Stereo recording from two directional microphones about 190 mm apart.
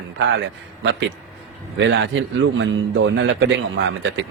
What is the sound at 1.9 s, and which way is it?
Speech, 75° right (ahead or behind).